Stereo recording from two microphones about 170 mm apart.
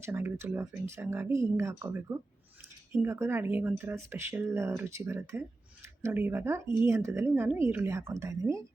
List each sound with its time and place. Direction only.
0.0 s a woman's voice: 15° right (ahead or behind)